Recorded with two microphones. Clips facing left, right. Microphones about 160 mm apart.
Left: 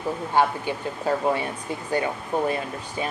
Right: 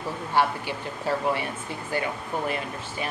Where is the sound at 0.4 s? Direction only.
20° left (ahead or behind).